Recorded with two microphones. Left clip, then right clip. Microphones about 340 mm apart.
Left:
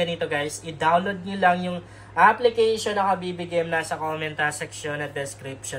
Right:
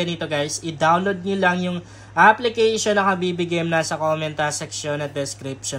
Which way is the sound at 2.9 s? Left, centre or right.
Right.